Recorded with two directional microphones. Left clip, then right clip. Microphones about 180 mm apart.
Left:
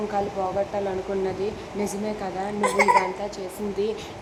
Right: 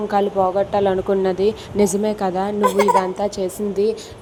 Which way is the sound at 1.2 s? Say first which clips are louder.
Right 9 dB; 40° right (ahead or behind).